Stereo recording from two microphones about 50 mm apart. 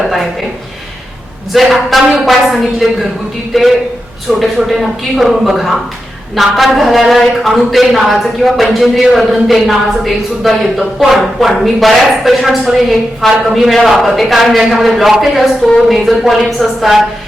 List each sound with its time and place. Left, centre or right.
1.5 s a man's voice: centre